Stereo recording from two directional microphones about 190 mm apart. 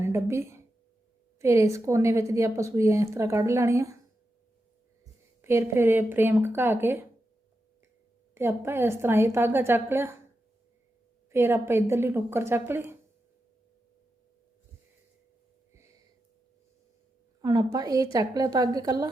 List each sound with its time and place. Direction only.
0.0 s a woman's voice: 15° right (ahead or behind)
5.4 s a woman's voice: 15° right (ahead or behind)
8.4 s a woman's voice: 10° right (ahead or behind)
11.3 s a woman's voice: 15° right (ahead or behind)
15.7 s a sound: 15° right (ahead or behind)
17.4 s a woman's voice: 20° right (ahead or behind)